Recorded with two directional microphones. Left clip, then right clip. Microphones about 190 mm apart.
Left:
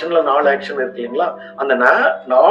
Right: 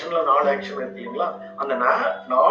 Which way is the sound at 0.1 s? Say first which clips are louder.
Left 5 dB; 40° left (ahead or behind).